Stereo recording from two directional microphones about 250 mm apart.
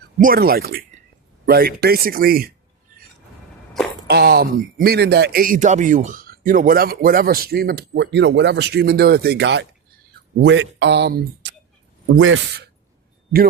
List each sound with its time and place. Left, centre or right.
0.2 s speech: right
4.1 s speech: right